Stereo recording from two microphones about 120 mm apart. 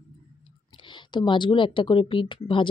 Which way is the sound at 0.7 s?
40° left (ahead or behind).